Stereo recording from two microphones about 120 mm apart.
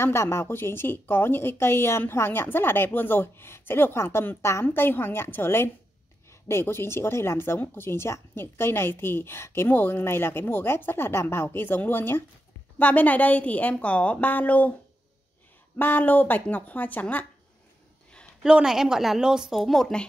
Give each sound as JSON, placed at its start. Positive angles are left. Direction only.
{"t": 0.0, "sound": "a woman's voice", "side_deg": 20}
{"t": 15.8, "sound": "a woman's voice", "side_deg": 15}
{"t": 18.4, "sound": "speech", "side_deg": -5}